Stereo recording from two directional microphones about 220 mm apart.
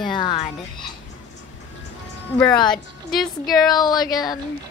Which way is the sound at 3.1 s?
Centre (ahead or behind).